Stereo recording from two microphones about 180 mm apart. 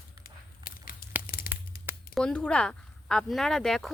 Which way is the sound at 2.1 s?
5° left (ahead or behind).